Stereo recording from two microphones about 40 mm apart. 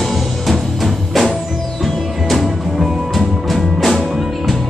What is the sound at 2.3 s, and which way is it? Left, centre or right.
Music, centre.